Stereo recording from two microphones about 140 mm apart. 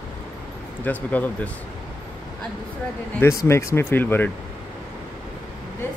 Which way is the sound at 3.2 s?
20° left (ahead or behind).